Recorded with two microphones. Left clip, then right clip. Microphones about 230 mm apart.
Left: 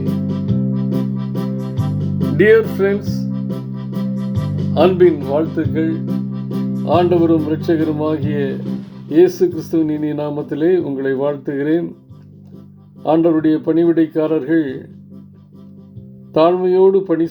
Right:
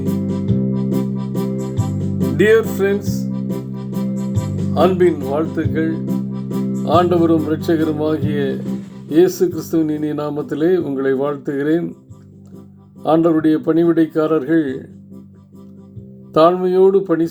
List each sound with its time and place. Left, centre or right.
0.0 s organ: right
2.3 s music: centre
3.4 s organ: right
4.7 s speech: centre
6.1 s music: right
6.8 s speech: centre
13.0 s speech: centre
16.3 s speech: centre